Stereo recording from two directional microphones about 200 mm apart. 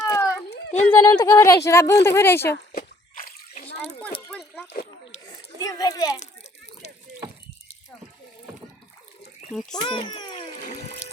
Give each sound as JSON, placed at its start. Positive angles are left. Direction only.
{"t": 0.0, "sound": "a sound", "side_deg": 15}
{"t": 0.9, "sound": "speech", "side_deg": 15}
{"t": 2.7, "sound": "splash", "side_deg": 45}
{"t": 4.3, "sound": "a sound", "side_deg": 5}
{"t": 5.5, "sound": "speech", "side_deg": 15}
{"t": 9.5, "sound": "a child's voice", "side_deg": 0}
{"t": 9.8, "sound": "a child's voice", "side_deg": 25}